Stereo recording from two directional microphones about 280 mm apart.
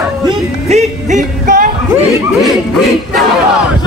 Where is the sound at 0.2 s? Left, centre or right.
Centre.